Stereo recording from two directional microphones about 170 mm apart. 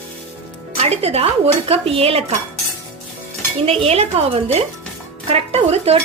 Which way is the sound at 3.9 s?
35° right (ahead or behind).